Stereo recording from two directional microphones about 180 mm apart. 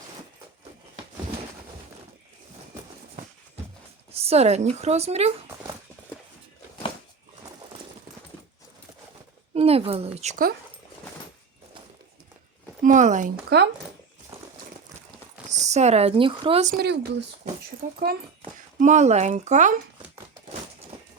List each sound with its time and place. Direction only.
4.1 s a woman's voice: 35° right (ahead or behind)
9.6 s a woman's voice: 35° right (ahead or behind)
12.8 s speech: 45° right (ahead or behind)
13.5 s speech: 65° right (ahead or behind)
14.3 s crumpling: 35° right (ahead or behind)
15.4 s speech: 40° right (ahead or behind)
16.7 s speech: 65° right (ahead or behind)
18.8 s a woman's voice: 40° right (ahead or behind)